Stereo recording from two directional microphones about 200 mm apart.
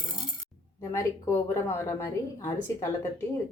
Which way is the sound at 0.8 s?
15° left (ahead or behind).